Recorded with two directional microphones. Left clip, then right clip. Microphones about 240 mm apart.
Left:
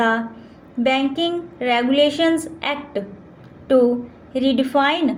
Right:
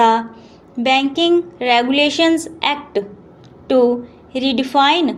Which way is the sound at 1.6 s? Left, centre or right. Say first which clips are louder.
Left 1 dB; right.